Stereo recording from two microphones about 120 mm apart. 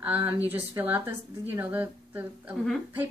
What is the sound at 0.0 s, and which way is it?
Speech, 15° right (ahead or behind).